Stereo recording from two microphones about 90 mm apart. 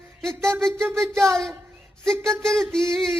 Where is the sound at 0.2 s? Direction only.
5° left (ahead or behind).